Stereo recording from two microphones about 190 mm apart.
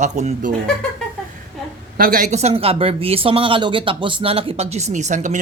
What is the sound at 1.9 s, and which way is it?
Speech, 50° right (ahead or behind).